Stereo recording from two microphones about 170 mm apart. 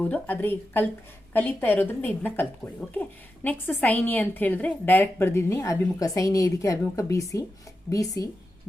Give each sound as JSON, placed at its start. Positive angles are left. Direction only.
{"t": 0.0, "sound": "a woman's voice", "side_deg": 10}